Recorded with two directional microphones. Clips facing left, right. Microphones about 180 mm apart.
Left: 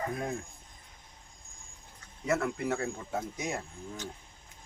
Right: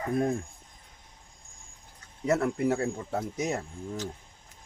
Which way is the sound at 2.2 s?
35° right (ahead or behind).